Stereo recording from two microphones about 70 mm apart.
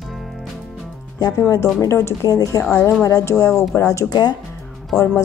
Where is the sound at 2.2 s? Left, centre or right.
Left.